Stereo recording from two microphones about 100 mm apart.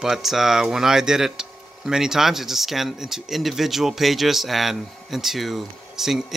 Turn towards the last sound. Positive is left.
turn(degrees=-5)  # may be behind; listen again after turning